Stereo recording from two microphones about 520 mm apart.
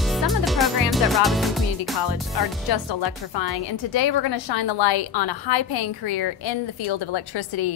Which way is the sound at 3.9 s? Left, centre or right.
Left.